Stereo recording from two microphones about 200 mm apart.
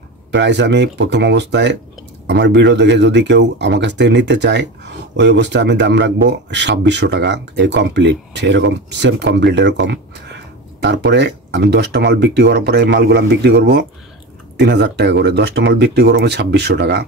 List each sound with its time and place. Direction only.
0.3 s speech: 60° right (ahead or behind)